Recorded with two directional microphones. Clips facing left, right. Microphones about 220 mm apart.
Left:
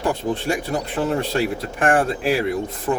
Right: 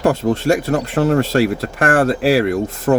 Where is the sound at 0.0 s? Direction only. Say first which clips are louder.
Right 6 dB; 90° right.